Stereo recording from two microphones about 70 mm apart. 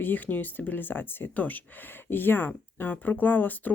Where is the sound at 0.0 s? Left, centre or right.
Left.